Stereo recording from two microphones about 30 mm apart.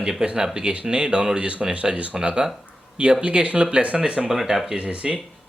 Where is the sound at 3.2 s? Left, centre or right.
Right.